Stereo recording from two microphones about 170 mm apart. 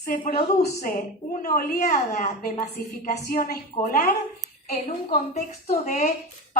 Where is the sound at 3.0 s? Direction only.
60° left (ahead or behind).